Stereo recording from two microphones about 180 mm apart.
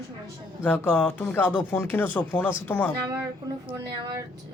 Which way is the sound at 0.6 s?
10° left (ahead or behind).